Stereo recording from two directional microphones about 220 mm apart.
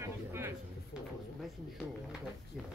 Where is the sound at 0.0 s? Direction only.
10° right (ahead or behind).